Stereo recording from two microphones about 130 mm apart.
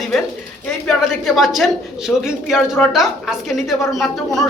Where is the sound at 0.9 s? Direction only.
Centre (ahead or behind).